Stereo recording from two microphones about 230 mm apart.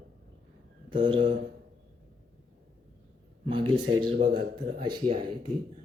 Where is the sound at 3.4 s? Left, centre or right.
Right.